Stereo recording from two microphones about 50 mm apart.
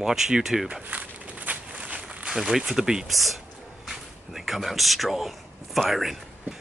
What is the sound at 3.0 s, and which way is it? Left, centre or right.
Speech, centre.